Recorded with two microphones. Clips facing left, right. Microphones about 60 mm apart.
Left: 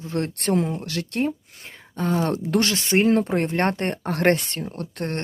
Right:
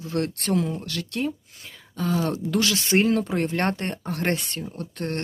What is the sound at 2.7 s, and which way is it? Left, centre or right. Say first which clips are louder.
Speech: left 2 dB; left.